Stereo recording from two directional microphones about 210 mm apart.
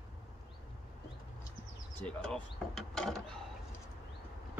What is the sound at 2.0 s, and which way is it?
Speech, 5° left (ahead or behind).